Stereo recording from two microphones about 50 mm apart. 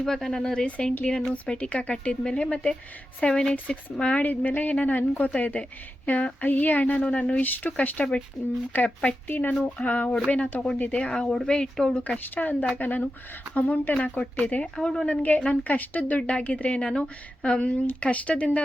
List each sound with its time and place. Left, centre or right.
0.0 s a woman's voice: centre
4.0 s a woman's voice: left
6.9 s a woman's voice: left
8.7 s a woman's voice: left
11.0 s speech: centre
12.3 s a woman's voice: left
13.5 s a woman's voice: left